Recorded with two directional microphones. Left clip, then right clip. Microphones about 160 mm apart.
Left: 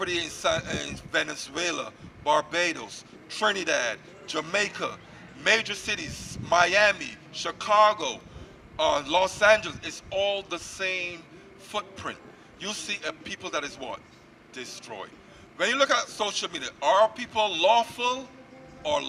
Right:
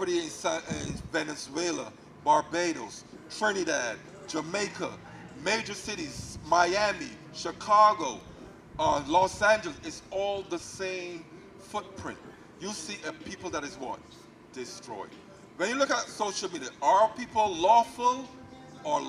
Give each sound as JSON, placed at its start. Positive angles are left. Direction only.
{"t": 0.0, "sound": "a man's voice", "side_deg": 25}